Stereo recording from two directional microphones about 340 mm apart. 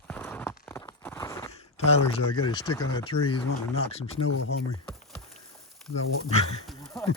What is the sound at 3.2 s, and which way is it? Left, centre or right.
Speech, left.